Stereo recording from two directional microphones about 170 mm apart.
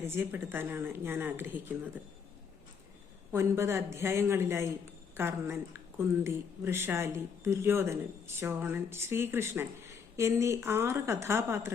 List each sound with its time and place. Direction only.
0.0 s speech: 15° right (ahead or behind)
3.3 s speech: 15° right (ahead or behind)